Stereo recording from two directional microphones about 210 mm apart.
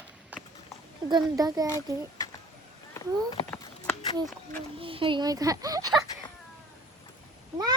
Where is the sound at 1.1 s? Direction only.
15° right (ahead or behind).